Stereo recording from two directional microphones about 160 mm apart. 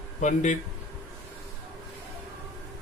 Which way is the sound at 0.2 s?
45° left (ahead or behind).